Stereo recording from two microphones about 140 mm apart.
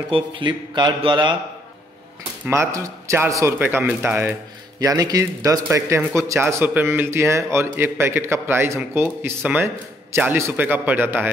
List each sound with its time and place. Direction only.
0.1 s a man's voice: 35° right (ahead or behind)
2.4 s a man's voice: 20° right (ahead or behind)